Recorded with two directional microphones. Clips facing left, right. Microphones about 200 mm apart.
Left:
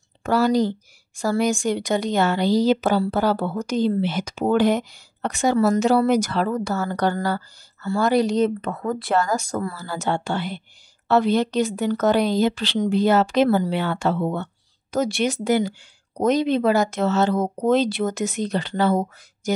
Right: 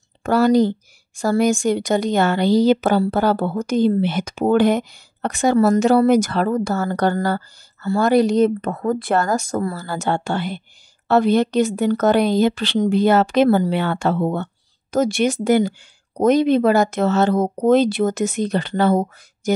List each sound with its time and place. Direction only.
0.2 s a woman's voice: 55° right (ahead or behind)